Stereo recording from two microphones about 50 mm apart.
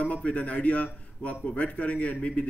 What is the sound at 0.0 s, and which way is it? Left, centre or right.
Speech, left.